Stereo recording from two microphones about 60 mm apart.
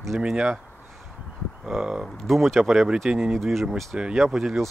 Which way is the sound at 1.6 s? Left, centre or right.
Centre.